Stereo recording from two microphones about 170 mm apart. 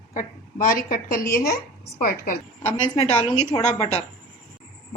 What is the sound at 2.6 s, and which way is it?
A woman's voice, 40° left (ahead or behind).